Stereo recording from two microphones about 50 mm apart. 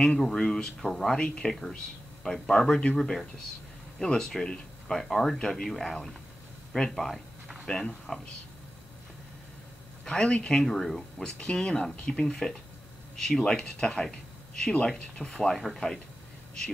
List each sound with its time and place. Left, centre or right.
0.2 s speech: centre
10.0 s speech: centre
11.2 s speech: centre